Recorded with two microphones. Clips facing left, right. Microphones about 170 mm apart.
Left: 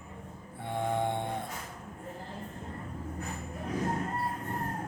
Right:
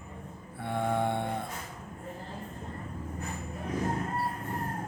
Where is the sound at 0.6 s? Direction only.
15° left (ahead or behind).